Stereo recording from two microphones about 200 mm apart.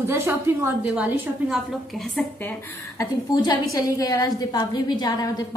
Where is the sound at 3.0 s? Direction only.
15° left (ahead or behind).